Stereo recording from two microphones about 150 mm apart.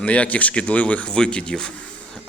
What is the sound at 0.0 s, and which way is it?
A man's voice, 10° left (ahead or behind).